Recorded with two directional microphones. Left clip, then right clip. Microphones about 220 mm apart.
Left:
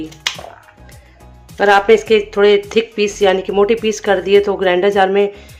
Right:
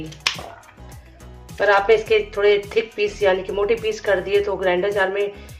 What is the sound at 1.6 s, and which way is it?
Speech, 40° left (ahead or behind).